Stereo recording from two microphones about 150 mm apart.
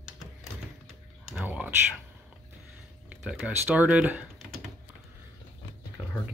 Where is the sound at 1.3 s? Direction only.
10° right (ahead or behind).